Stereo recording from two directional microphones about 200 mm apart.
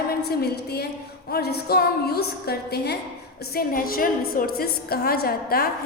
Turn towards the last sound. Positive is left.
turn(degrees=50)  # may be behind; listen again after turning